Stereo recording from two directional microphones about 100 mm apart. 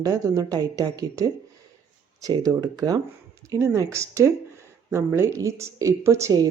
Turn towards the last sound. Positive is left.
turn(degrees=-30)  # may be behind; listen again after turning